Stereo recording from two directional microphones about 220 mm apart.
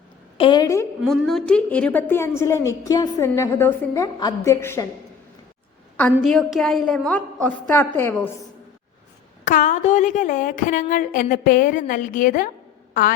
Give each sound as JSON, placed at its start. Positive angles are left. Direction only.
{"t": 0.3, "sound": "a woman's voice", "side_deg": 20}
{"t": 1.0, "sound": "a woman's voice", "side_deg": 0}
{"t": 6.0, "sound": "a woman's voice", "side_deg": 5}
{"t": 9.4, "sound": "a woman's voice", "side_deg": 35}